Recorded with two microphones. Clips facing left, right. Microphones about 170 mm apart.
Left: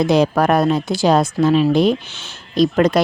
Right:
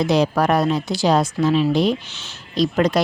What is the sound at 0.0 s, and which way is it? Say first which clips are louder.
Speech: left 3 dB; 50° left (ahead or behind).